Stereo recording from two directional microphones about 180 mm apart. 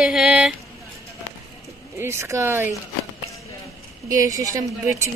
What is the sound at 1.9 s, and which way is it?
Speech, 15° right (ahead or behind).